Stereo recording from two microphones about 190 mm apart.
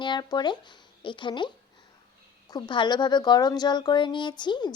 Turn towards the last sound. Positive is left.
turn(degrees=25)  # may be behind; listen again after turning